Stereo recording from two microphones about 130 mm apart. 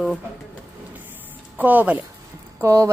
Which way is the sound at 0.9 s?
15° right (ahead or behind).